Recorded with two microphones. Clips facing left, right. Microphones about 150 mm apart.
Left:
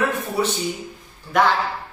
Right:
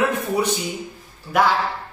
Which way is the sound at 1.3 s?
5° right (ahead or behind).